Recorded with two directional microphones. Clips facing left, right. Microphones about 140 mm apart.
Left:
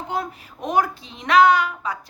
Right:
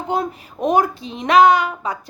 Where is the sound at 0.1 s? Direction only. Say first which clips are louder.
Right 7 dB; 20° right (ahead or behind).